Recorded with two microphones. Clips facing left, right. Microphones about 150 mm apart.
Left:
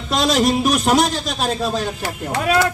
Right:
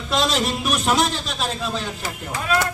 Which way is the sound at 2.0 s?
65° left (ahead or behind).